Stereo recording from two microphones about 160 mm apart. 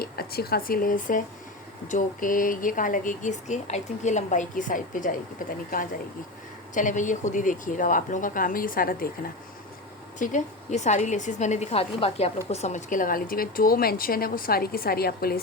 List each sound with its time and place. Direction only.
0.0 s speech: 70° left (ahead or behind)
6.7 s speech: 50° left (ahead or behind)
10.2 s a woman's voice: 50° left (ahead or behind); by 15.4 s 75° left (ahead or behind)